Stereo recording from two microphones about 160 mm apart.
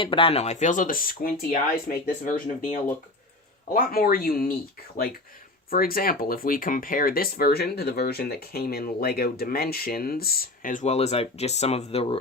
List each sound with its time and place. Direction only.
0.0 s speech: 35° left (ahead or behind)